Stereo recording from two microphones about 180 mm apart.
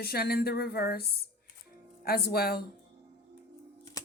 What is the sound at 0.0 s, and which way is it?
Speech, 60° left (ahead or behind).